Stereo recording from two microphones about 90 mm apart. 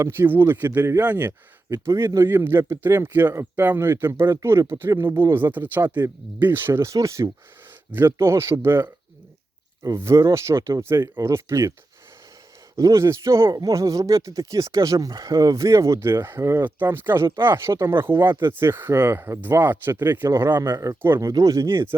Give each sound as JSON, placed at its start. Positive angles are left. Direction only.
{"t": 0.0, "sound": "speech", "side_deg": -25}
{"t": 12.7, "sound": "speech", "side_deg": -35}
{"t": 20.6, "sound": "speech", "side_deg": -35}